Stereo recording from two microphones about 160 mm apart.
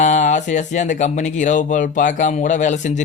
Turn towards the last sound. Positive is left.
turn(degrees=50)  # may be behind; listen again after turning